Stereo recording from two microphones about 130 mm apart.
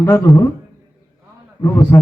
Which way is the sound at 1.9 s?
15° left (ahead or behind).